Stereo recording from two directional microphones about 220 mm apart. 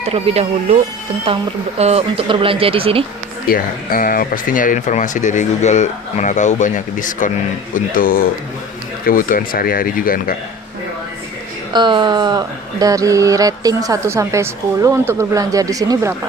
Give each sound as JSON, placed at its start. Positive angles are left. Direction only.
{"t": 0.1, "sound": "speech", "side_deg": -25}
{"t": 1.8, "sound": "speech", "side_deg": -30}
{"t": 3.5, "sound": "speech", "side_deg": 40}
{"t": 11.7, "sound": "a woman's voice", "side_deg": -20}